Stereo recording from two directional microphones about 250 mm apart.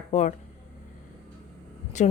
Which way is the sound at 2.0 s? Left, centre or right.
Left.